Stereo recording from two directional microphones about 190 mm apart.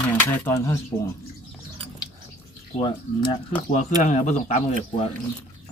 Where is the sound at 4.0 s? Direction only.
35° left (ahead or behind).